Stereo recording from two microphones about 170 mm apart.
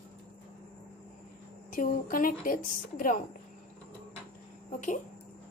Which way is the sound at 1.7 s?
55° left (ahead or behind).